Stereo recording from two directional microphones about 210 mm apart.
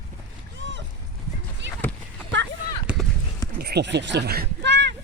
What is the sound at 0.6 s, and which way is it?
Boat, 60° right (ahead or behind).